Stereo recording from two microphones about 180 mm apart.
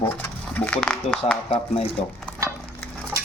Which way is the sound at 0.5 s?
10° left (ahead or behind).